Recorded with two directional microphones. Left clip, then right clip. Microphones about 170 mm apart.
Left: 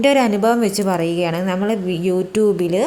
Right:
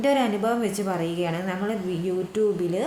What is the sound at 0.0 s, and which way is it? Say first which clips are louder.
A woman's voice: left 8 dB; 45° left (ahead or behind).